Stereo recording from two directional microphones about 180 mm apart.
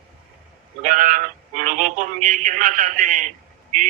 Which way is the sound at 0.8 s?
45° right (ahead or behind).